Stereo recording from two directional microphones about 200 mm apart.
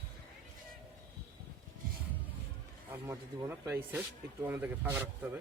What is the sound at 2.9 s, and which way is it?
Speech, 10° right (ahead or behind).